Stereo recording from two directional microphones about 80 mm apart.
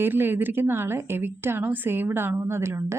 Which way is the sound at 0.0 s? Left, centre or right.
Right.